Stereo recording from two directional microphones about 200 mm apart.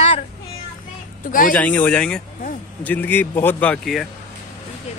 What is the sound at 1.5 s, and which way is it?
Speech, 10° left (ahead or behind).